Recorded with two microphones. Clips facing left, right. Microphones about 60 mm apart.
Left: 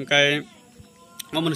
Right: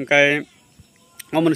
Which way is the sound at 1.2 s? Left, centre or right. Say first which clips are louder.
Right 7 dB; right.